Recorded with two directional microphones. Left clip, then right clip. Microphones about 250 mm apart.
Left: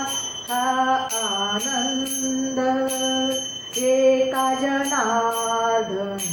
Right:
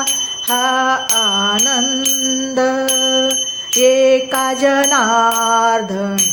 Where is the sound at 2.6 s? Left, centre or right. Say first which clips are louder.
Right 7 dB; right.